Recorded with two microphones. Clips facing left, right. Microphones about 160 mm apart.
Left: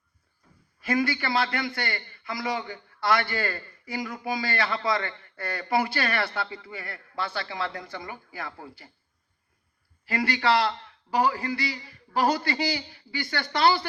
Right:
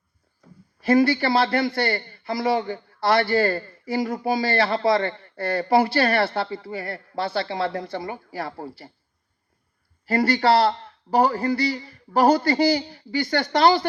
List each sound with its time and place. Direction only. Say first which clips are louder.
0.8 s a man's voice: right 8 dB; 35° right (ahead or behind)
10.1 s a man's voice: right 6 dB; 40° right (ahead or behind)